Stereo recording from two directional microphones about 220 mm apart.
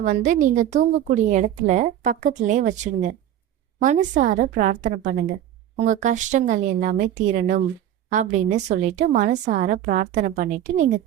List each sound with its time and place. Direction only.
0.0 s a woman's voice: 35° right (ahead or behind)